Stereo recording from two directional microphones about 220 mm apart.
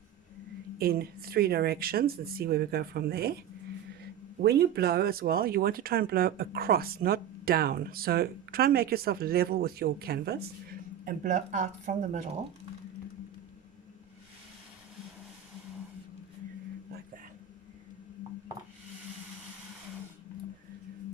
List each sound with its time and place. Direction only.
0.8 s speech: 45° right (ahead or behind)
4.4 s speech: 45° right (ahead or behind)